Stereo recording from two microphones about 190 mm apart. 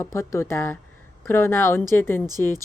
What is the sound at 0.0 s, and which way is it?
Speech, 15° left (ahead or behind).